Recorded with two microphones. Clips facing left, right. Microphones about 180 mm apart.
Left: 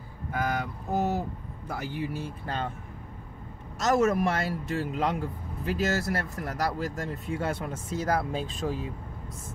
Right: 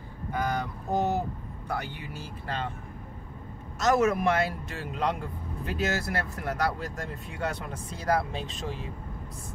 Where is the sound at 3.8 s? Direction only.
Centre (ahead or behind).